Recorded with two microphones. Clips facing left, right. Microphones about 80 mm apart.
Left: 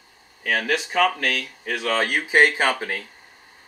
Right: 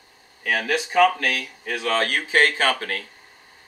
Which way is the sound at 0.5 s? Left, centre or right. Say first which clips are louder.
Even; centre.